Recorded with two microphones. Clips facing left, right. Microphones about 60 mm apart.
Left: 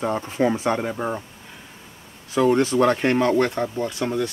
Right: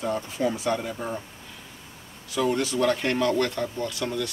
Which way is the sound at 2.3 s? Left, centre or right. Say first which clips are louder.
Left 7 dB; left.